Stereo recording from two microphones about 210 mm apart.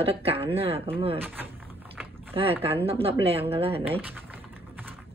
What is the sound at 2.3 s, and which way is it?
A woman's voice, 25° right (ahead or behind).